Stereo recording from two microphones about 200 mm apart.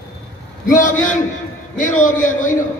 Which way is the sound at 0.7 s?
40° left (ahead or behind).